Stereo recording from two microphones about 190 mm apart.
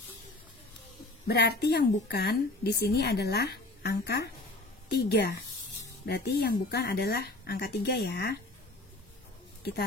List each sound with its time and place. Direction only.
1.2 s a woman's voice: 60° left (ahead or behind)